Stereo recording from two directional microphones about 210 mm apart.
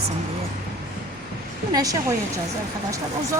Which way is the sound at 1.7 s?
15° right (ahead or behind).